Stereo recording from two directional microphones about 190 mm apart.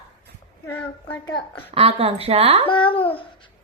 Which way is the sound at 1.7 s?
30° right (ahead or behind).